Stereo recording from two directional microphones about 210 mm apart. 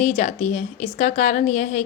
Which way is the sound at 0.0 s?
30° left (ahead or behind).